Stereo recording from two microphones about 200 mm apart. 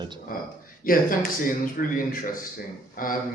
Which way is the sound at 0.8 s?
45° left (ahead or behind).